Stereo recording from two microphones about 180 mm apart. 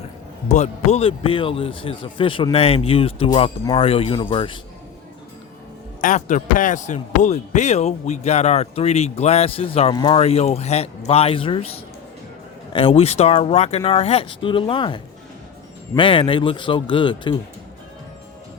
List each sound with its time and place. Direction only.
0.4 s a man's voice: 40° left (ahead or behind)
6.0 s a man's voice: 45° left (ahead or behind); by 10.2 s 20° left (ahead or behind)
10.2 s a man's voice: 35° left (ahead or behind)
12.7 s a man's voice: 30° left (ahead or behind)